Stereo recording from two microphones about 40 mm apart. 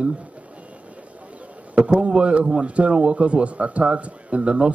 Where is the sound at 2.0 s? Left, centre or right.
Right.